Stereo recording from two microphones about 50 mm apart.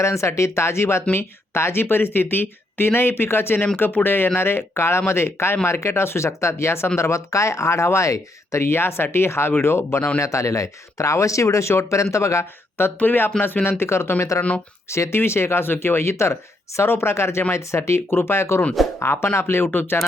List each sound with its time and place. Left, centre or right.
0.0 s speech: left
6.9 s speech: left
10.2 s speech: left
13.0 s speech: left
15.6 s speech: left
18.1 s speech: left
18.9 s speech: left